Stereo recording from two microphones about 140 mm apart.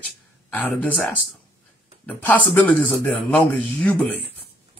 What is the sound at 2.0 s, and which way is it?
Speech, 10° left (ahead or behind).